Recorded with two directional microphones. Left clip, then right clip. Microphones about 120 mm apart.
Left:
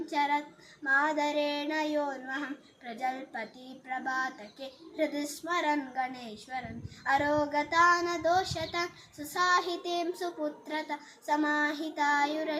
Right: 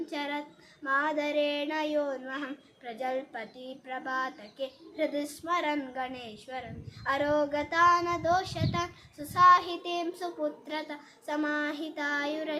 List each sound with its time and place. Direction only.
0.0 s female singing: 15° right (ahead or behind)
0.9 s child singing: 15° right (ahead or behind)